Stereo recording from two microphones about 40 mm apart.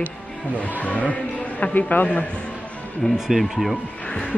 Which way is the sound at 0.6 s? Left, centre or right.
Left.